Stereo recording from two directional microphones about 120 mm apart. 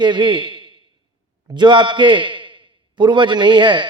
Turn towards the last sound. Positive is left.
turn(degrees=-40)  # may be behind; listen again after turning